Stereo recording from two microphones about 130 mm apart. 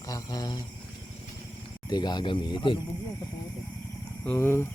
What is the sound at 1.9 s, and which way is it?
Speech, 35° left (ahead or behind).